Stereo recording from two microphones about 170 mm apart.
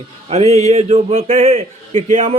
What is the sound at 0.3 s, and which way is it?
A man's voice, 40° right (ahead or behind).